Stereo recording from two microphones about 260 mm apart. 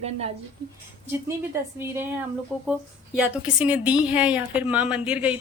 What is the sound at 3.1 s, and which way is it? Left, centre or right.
A woman's voice, centre.